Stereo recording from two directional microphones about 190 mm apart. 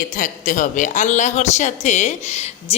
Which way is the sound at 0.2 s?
45° left (ahead or behind).